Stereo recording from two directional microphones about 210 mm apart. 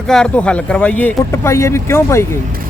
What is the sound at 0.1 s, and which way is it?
Speech, 5° left (ahead or behind).